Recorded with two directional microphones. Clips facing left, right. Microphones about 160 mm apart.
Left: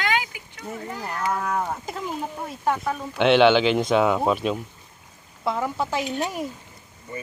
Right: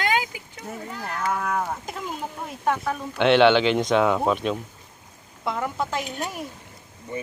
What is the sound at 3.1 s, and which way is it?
Speech, 5° left (ahead or behind).